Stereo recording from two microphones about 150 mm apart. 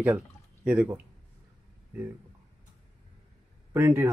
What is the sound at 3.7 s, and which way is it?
Speech, 20° right (ahead or behind).